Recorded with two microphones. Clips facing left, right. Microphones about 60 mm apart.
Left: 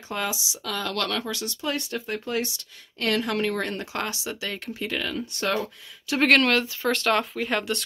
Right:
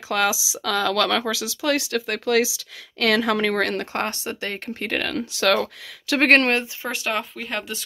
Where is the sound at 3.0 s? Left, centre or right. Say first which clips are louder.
Right 5 dB; right.